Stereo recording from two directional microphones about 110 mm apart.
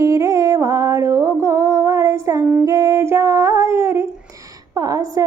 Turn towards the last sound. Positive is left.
turn(degrees=-30)  # may be behind; listen again after turning